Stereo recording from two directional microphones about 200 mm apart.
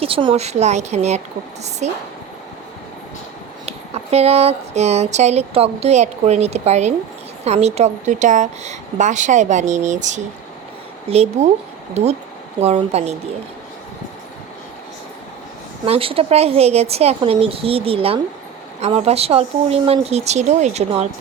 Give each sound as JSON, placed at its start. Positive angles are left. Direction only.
{"t": 0.0, "sound": "speech", "side_deg": -25}
{"t": 3.7, "sound": "speech", "side_deg": -30}
{"t": 15.9, "sound": "a woman's voice", "side_deg": -30}